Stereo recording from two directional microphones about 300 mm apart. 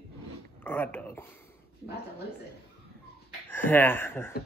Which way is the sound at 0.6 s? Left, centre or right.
Centre.